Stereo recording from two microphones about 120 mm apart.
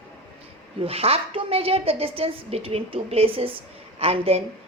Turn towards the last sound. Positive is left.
turn(degrees=-55)  # may be behind; listen again after turning